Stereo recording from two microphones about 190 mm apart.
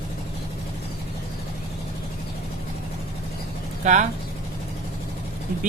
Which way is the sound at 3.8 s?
35° right (ahead or behind).